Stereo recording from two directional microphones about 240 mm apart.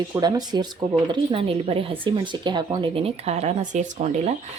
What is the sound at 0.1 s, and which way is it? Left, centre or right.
A woman's voice, centre.